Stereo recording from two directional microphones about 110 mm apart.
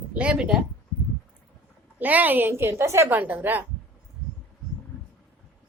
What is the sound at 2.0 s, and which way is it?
Speech, 15° right (ahead or behind).